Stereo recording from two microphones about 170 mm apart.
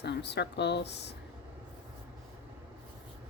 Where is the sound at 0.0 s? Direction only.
80° left.